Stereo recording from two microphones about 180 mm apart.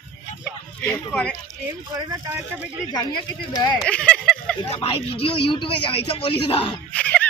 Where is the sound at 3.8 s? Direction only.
5° left (ahead or behind).